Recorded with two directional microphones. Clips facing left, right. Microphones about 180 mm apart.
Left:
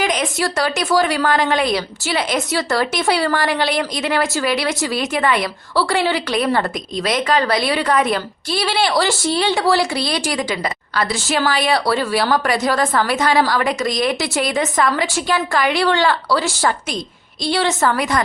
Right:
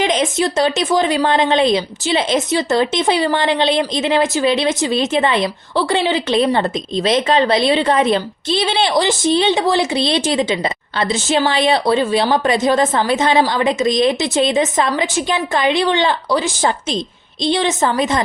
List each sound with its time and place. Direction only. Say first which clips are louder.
0.0 s a woman's voice: right 3 dB; 25° right (ahead or behind)